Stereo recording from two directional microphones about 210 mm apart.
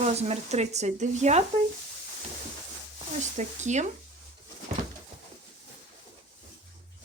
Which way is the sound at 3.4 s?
35° right (ahead or behind).